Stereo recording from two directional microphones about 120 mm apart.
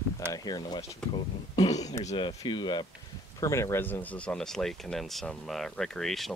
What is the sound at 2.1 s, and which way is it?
Speech, 40° left (ahead or behind).